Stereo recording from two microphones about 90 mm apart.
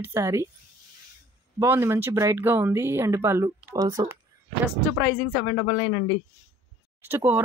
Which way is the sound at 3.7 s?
45° right (ahead or behind).